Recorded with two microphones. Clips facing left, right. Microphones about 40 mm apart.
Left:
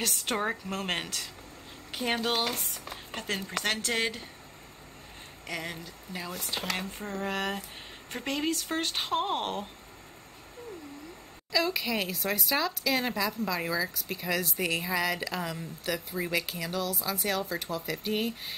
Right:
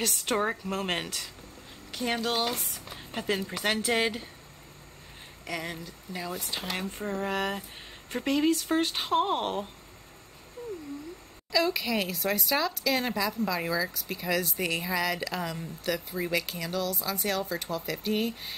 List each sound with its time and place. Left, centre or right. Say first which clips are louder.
0.0 s speech: right 2 dB; centre
1.9 s a sound: even; centre
2.1 s speech: right 1 dB; centre
5.5 s speech: right 2 dB; centre
11.5 s speech: right 2 dB; centre